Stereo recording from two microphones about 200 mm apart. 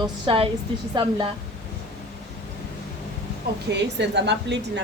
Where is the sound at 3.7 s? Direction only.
60° right (ahead or behind).